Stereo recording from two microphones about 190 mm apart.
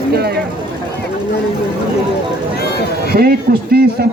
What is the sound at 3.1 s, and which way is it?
Speech, 55° right (ahead or behind).